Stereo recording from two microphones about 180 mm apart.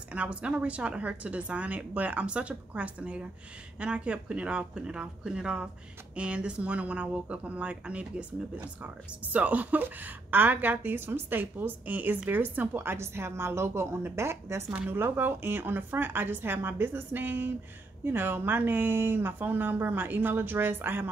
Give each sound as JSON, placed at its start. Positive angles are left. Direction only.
{"t": 0.1, "sound": "a woman's voice", "side_deg": -5}